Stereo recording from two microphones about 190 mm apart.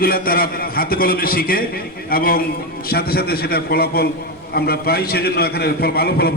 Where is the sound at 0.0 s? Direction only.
50° left (ahead or behind).